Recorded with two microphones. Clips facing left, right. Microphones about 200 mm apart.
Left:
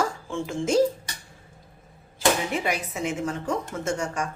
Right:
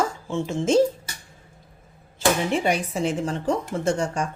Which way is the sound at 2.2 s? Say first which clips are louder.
Right 3 dB; 30° right (ahead or behind).